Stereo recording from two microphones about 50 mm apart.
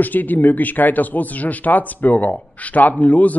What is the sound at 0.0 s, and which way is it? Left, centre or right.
Speech, left.